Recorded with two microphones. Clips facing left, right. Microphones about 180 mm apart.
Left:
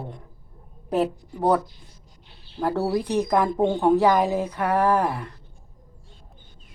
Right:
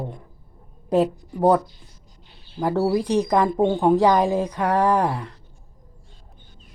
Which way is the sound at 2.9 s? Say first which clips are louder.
Right 2 dB; 15° right (ahead or behind).